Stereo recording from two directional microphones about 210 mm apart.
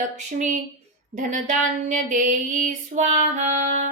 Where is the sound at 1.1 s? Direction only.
35° right (ahead or behind).